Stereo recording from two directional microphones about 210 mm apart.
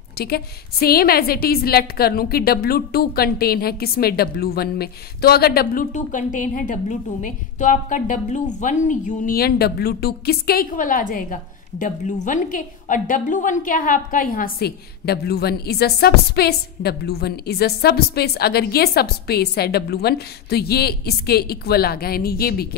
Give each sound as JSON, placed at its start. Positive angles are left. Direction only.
{"t": 0.2, "sound": "a woman's voice", "side_deg": 45}